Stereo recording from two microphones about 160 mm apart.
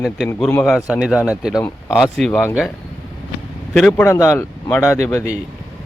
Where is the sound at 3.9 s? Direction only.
15° left (ahead or behind).